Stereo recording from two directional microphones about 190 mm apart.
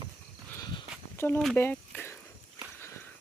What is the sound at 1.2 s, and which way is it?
Speech, 10° left (ahead or behind).